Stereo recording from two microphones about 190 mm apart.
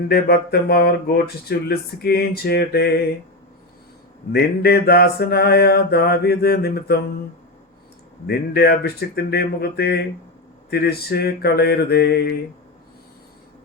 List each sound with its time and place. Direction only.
0.1 s speech: 55° left (ahead or behind)
4.3 s speech: 60° left (ahead or behind)
8.3 s speech: 55° left (ahead or behind)